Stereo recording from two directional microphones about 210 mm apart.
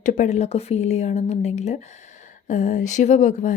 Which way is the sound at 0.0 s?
35° left (ahead or behind).